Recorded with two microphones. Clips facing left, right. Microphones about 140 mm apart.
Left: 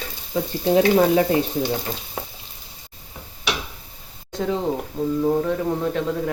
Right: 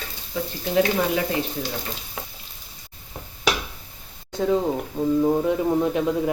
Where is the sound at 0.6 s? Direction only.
30° left (ahead or behind).